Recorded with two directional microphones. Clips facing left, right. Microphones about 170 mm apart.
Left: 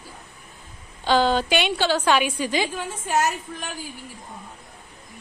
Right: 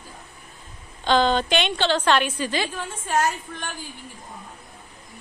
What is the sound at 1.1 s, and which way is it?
A woman's voice, 10° left (ahead or behind).